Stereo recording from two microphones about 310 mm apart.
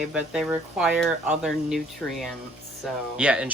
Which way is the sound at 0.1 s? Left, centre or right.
Centre.